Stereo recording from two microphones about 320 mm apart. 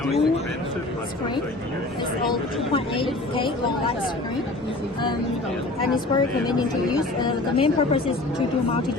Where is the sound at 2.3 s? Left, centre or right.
Centre.